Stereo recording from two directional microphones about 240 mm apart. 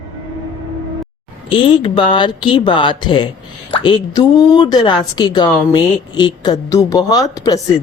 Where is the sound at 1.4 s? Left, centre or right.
Left.